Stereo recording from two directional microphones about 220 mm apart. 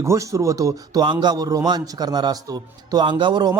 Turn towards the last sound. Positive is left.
turn(degrees=-20)  # may be behind; listen again after turning